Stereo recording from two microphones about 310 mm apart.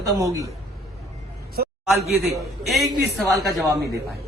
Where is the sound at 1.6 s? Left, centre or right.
Right.